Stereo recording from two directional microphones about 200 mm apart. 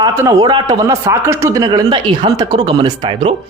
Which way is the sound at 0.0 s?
15° right (ahead or behind).